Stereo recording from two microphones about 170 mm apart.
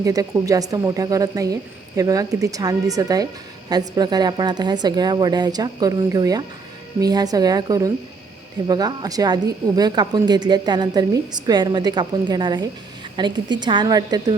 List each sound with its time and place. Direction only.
0.0 s a woman's voice: 20° right (ahead or behind)